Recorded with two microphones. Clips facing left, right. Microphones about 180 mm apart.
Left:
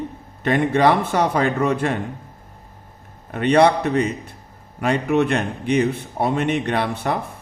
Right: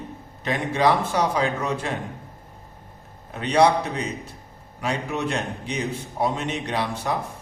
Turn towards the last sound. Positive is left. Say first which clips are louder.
# left 4 dB
turn(degrees=60)  # may be behind; listen again after turning